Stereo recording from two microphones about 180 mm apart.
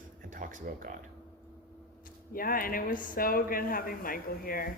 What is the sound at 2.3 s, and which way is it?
Speech, 55° left (ahead or behind).